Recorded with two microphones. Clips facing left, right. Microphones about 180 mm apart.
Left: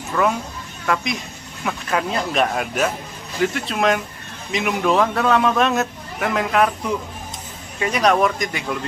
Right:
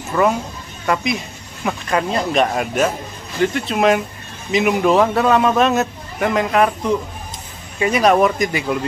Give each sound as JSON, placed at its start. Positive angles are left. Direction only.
{"t": 0.1, "sound": "speech", "side_deg": -10}
{"t": 0.9, "sound": "a man's voice", "side_deg": 0}